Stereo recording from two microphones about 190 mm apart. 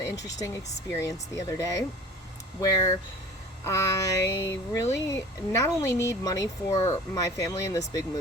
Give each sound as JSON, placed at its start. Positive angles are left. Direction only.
{"t": 0.3, "sound": "speech", "side_deg": 20}